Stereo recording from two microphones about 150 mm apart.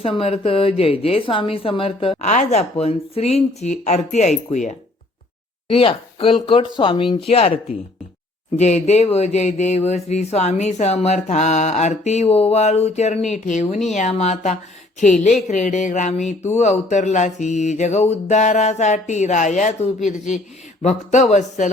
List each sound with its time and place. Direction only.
0.0 s a woman's voice: 40° left (ahead or behind)
2.2 s speech: 50° left (ahead or behind)
5.6 s a woman's voice: 35° left (ahead or behind)
8.5 s speech: 50° left (ahead or behind)
15.4 s a sound: 55° left (ahead or behind)
16.5 s speech: 50° left (ahead or behind)